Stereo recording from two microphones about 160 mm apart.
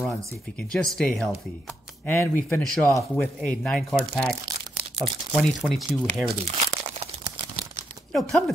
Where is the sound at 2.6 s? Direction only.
5° left (ahead or behind).